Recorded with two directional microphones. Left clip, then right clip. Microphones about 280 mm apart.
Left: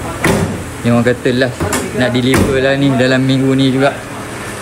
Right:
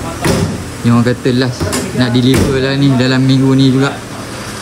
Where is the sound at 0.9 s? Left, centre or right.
Centre.